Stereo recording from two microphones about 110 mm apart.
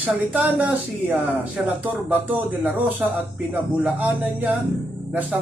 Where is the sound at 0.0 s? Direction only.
15° right (ahead or behind).